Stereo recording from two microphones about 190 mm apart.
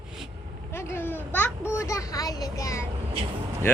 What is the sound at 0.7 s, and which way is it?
A child's voice, 10° left (ahead or behind).